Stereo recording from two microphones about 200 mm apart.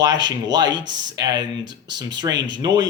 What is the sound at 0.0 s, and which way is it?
A man's voice, 20° right (ahead or behind).